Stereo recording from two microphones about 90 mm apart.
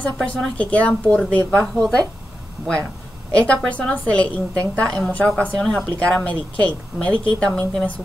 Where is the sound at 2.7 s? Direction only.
10° left (ahead or behind).